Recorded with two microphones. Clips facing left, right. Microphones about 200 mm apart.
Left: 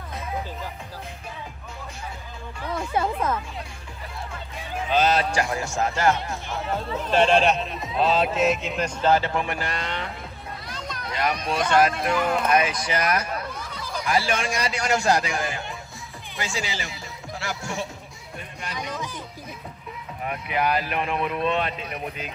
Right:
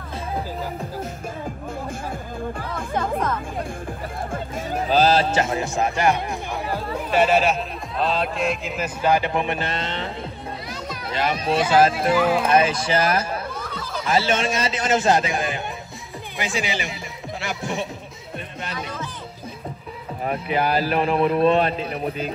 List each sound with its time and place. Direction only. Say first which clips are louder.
4.2 s a man's voice: right 7 dB; 50° right (ahead or behind); by 10.0 s 25° right (ahead or behind)
10.7 s music: right 3 dB; 5° right (ahead or behind)
11.1 s speech: right 2 dB; 25° right (ahead or behind)
11.4 s speech: right 4 dB; 5° right (ahead or behind)
12.4 s a man's voice: right 3 dB; 30° right (ahead or behind)
18.8 s music: left 2 dB; 15° left (ahead or behind)
20.2 s speech: right 3 dB; 30° right (ahead or behind)